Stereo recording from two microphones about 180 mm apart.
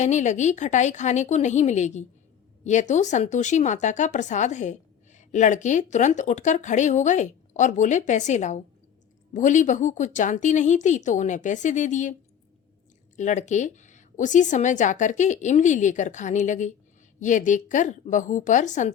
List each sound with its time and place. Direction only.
0.0 s speech: 40° left (ahead or behind)
13.1 s speech: 40° left (ahead or behind)